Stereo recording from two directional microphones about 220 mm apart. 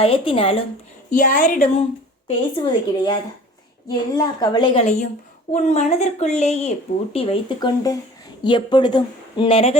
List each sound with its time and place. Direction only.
0.0 s speech: 25° left (ahead or behind)
1.1 s a woman's voice: 35° left (ahead or behind)
2.2 s a woman's voice: 25° left (ahead or behind)